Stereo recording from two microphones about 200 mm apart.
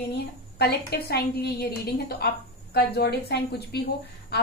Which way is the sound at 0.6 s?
50° left (ahead or behind).